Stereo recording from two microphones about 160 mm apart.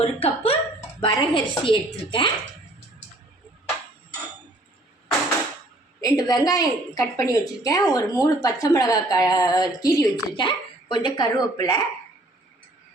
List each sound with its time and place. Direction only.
0.0 s speech: 40° left (ahead or behind)
6.0 s a woman's voice: 25° left (ahead or behind)